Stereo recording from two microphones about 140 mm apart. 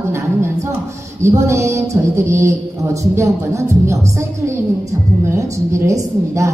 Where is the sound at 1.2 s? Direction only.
20° right (ahead or behind).